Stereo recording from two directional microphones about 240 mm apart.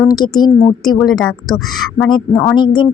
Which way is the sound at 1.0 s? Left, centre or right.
Centre.